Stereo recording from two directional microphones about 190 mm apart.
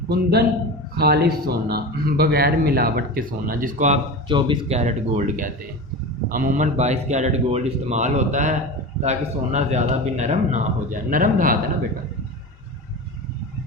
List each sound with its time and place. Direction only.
0.9 s speech: 55° right (ahead or behind); by 4.0 s 40° right (ahead or behind)
4.3 s speech: 25° right (ahead or behind); by 11.5 s 45° right (ahead or behind)